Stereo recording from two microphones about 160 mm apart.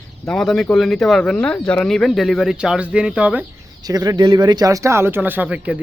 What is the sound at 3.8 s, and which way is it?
Speech, 25° right (ahead or behind).